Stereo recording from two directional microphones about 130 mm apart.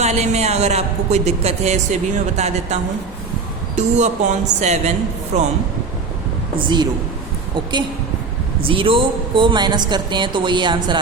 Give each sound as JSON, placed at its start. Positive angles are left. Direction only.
{"t": 0.0, "sound": "a woman's voice", "side_deg": -55}
{"t": 3.8, "sound": "a woman's voice", "side_deg": -65}
{"t": 8.6, "sound": "a woman's voice", "side_deg": -45}